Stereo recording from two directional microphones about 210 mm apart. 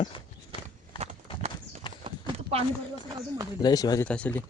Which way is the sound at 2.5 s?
30° right (ahead or behind).